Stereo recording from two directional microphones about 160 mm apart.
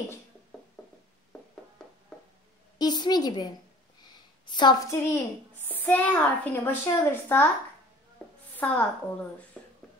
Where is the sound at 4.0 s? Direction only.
25° left (ahead or behind).